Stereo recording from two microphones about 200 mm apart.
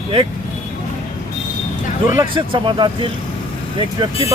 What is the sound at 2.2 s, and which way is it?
Speech, 25° right (ahead or behind).